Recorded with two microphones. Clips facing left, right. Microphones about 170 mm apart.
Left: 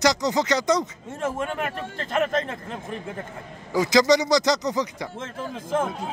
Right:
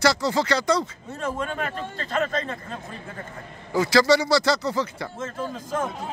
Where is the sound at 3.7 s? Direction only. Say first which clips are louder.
Even; 15° left (ahead or behind).